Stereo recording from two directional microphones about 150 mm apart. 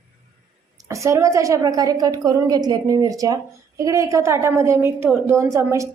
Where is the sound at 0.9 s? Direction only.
20° right (ahead or behind).